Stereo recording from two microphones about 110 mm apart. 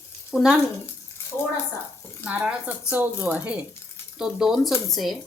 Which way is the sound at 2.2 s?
10° right (ahead or behind).